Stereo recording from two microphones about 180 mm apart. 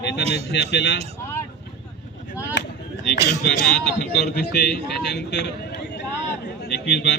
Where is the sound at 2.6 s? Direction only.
75° left (ahead or behind).